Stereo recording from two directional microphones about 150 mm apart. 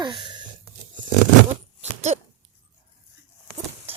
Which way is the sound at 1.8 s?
50° right (ahead or behind).